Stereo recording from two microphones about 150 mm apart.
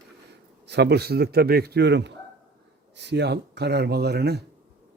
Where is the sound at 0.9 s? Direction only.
90° right.